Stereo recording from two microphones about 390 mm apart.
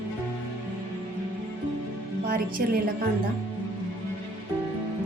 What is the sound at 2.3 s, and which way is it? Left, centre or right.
Speech, right.